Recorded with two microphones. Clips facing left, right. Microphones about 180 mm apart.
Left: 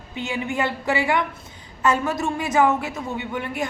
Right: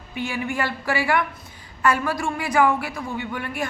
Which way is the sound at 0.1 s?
20° left (ahead or behind).